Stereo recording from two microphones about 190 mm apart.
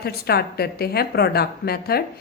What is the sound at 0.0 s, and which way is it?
A woman's voice, 55° left (ahead or behind).